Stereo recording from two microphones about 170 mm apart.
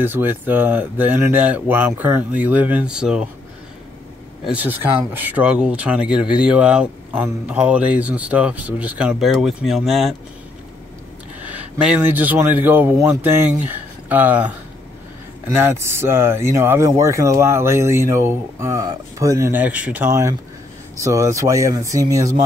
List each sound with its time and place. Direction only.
0.0 s speech: 10° right (ahead or behind)
4.5 s speech: 10° right (ahead or behind)
11.4 s a man's voice: 5° right (ahead or behind)